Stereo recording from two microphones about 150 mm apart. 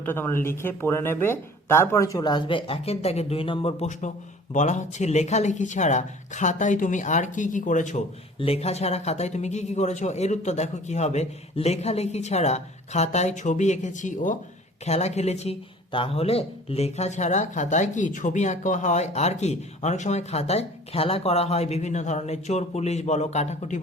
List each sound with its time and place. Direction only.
0.0 s speech: 15° left (ahead or behind); by 3.8 s 40° left (ahead or behind)
4.5 s speech: 50° left (ahead or behind)
8.4 s speech: 40° left (ahead or behind); by 14.3 s 55° left (ahead or behind)
14.8 s speech: 45° left (ahead or behind)